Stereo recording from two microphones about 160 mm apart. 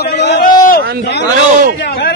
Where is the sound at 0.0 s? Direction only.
70° left (ahead or behind).